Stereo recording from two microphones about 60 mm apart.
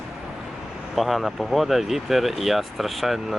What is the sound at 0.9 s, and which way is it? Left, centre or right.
Speech, centre.